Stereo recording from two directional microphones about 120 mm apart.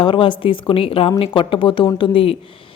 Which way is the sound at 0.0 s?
45° left (ahead or behind).